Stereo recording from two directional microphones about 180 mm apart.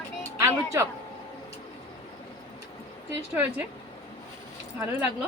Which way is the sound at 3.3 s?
10° right (ahead or behind).